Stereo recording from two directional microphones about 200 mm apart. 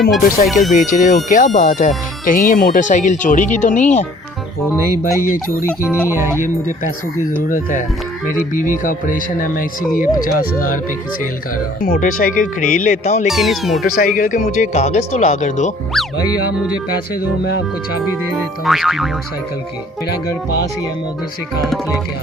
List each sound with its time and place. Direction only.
0.1 s music: centre (ahead or behind)
0.7 s speech: 40° left (ahead or behind)
6.1 s speech: 10° right (ahead or behind)
7.3 s speech: 40° left (ahead or behind)
11.8 s speech: 50° left (ahead or behind)
13.2 s music: centre (ahead or behind)
13.8 s speech: 45° left (ahead or behind)
18.3 s music: centre (ahead or behind)
20.1 s speech: 50° left (ahead or behind)
21.7 s music: centre (ahead or behind)